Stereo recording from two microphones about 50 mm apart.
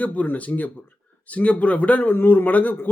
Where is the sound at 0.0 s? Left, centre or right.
Left.